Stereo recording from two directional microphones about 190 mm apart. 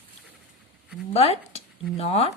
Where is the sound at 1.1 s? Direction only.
35° left (ahead or behind).